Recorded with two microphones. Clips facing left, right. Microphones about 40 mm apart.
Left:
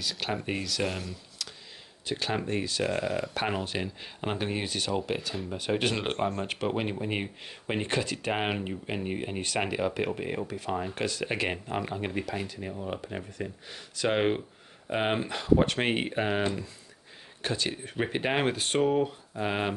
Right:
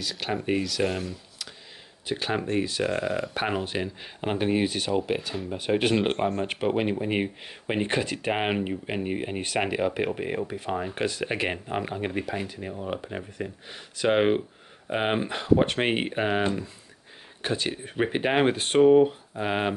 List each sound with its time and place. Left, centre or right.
0.0 s speech: centre
2.0 s speech: centre